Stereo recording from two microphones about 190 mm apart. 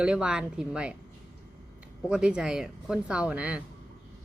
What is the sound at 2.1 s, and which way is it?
A man's voice, 5° right (ahead or behind).